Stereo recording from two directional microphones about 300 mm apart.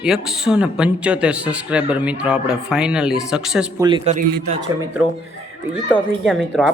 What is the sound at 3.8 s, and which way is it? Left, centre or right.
Speech, centre.